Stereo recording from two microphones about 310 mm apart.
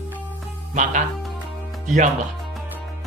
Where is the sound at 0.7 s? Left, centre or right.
Right.